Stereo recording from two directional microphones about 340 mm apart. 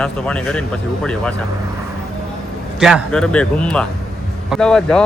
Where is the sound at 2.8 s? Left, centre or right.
Centre.